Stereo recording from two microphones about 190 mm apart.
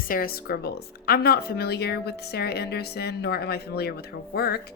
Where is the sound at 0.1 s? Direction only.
50° left (ahead or behind).